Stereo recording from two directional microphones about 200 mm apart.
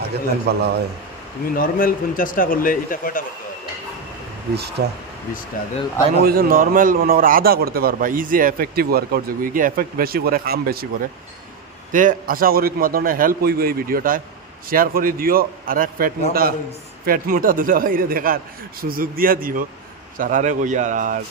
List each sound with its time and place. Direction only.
0.5 s speech: 55° right (ahead or behind)
1.5 s speech: 45° left (ahead or behind)
4.6 s speech: 55° right (ahead or behind)
6.2 s a man's voice: 45° right (ahead or behind)
11.9 s a man's voice: 40° right (ahead or behind)